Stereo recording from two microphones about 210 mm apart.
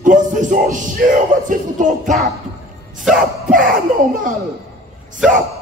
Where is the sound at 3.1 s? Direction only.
40° right (ahead or behind).